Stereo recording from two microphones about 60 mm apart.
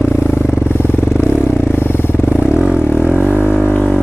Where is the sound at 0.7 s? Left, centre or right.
Left.